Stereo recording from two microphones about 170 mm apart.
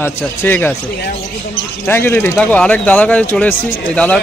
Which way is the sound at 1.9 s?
15° left (ahead or behind).